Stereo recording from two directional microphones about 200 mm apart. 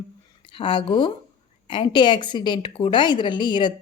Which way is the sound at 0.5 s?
25° left (ahead or behind).